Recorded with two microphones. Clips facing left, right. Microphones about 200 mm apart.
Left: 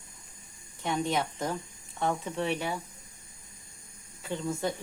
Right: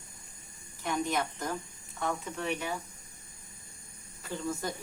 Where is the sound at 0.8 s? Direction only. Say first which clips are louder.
Left 2 dB; 25° left (ahead or behind).